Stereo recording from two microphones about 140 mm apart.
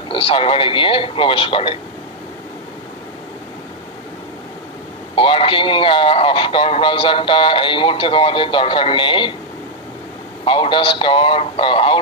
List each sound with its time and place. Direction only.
0.1 s speech: 40° left (ahead or behind)
5.1 s speech: 40° left (ahead or behind)
10.4 s speech: 40° left (ahead or behind)